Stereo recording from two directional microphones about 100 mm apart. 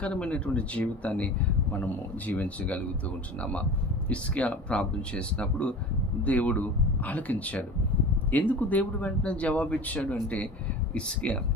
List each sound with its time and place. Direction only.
0.0 s speech: 10° left (ahead or behind)
4.1 s speech: 15° left (ahead or behind)